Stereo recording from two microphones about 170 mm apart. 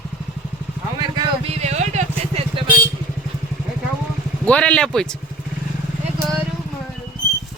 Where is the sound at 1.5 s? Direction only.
40° right (ahead or behind).